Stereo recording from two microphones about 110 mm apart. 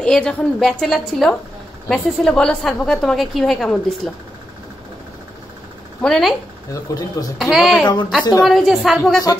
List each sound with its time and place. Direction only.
0.0 s a woman's voice: 5° left (ahead or behind)
6.0 s a woman's voice: 5° left (ahead or behind)
6.7 s speech: 35° left (ahead or behind)
7.3 s a woman's voice: centre (ahead or behind)
7.8 s speech: 40° left (ahead or behind)
8.5 s a woman's voice: centre (ahead or behind)